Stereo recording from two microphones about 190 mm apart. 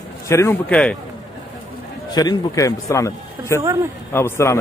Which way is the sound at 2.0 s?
20° left (ahead or behind).